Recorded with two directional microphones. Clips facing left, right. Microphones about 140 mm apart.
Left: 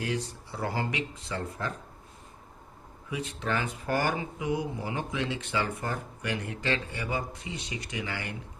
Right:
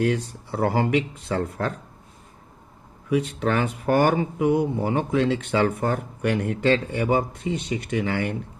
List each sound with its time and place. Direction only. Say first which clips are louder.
0.0 s speech: right 9 dB; 55° right (ahead or behind)
3.1 s speech: right 9 dB; 65° right (ahead or behind)